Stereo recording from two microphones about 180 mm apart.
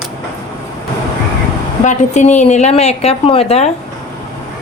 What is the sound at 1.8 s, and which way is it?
A woman's voice, 40° left (ahead or behind).